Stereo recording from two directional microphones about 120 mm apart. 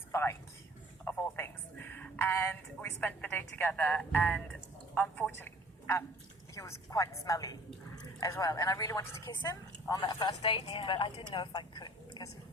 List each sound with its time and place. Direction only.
0.1 s a woman's voice: 20° left (ahead or behind); by 12.3 s 40° left (ahead or behind)